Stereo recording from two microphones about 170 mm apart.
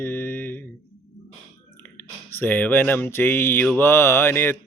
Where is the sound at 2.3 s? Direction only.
10° left (ahead or behind).